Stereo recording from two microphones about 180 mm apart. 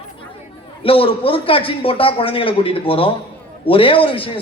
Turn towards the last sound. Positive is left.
turn(degrees=30)  # may be behind; listen again after turning